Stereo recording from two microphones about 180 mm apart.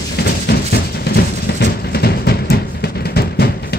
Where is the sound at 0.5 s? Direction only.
65° left (ahead or behind).